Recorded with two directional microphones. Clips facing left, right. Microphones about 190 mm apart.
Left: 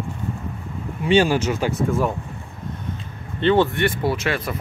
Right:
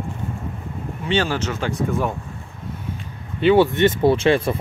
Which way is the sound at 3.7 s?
20° right (ahead or behind).